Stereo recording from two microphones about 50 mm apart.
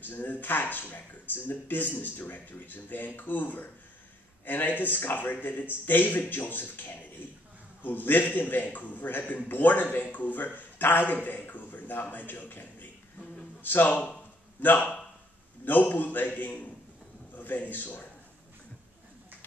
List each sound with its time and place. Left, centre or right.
0.0 s a man's voice: left